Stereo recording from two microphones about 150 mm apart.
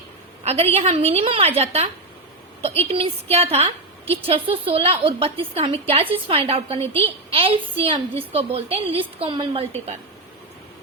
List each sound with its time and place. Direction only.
0.4 s a woman's voice: 40° right (ahead or behind)